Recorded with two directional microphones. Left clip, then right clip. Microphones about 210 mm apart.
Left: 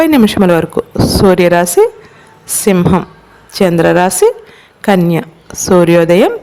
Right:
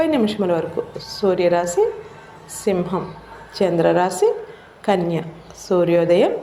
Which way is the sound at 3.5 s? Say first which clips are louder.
Left 7 dB; 70° left (ahead or behind).